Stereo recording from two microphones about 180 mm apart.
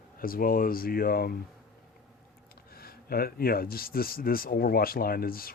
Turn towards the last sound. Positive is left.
turn(degrees=55)  # may be behind; listen again after turning